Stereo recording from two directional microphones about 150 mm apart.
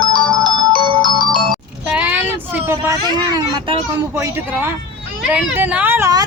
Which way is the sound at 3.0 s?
30° right (ahead or behind).